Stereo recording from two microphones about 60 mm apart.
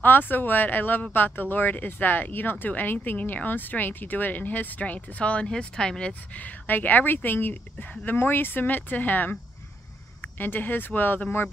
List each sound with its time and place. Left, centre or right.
0.0 s speech: left; by 6.4 s centre
6.4 s speech: left
10.4 s speech: left